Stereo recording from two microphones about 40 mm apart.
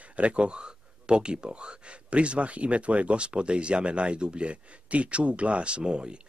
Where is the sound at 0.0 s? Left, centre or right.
Right.